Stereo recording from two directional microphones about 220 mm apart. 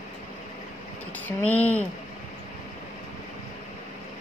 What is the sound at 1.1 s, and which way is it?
Speech, 5° left (ahead or behind).